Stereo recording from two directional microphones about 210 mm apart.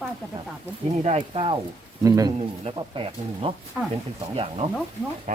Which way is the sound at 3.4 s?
25° right (ahead or behind).